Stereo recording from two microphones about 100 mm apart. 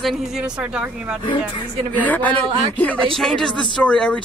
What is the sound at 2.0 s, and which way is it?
Speech, 15° left (ahead or behind).